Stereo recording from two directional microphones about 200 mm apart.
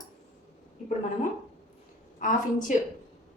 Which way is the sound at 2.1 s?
40° left (ahead or behind).